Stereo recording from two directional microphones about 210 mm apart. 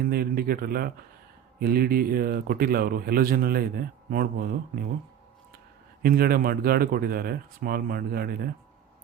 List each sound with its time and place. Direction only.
0.0 s a man's voice: 45° right (ahead or behind)
6.0 s speech: 45° right (ahead or behind)